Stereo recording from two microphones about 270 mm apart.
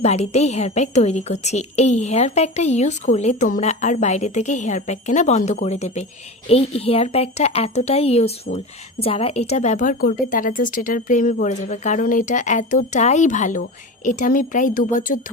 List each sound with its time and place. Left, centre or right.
0.0 s speech: left